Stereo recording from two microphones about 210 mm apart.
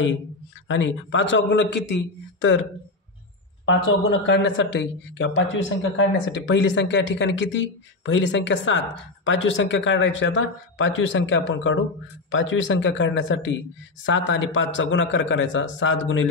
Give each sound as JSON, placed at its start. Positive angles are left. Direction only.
{"t": 0.7, "sound": "a man's voice", "side_deg": 60}
{"t": 3.6, "sound": "a man's voice", "side_deg": 65}